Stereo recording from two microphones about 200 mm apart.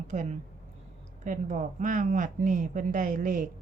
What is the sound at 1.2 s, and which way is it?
A woman's voice, 35° right (ahead or behind).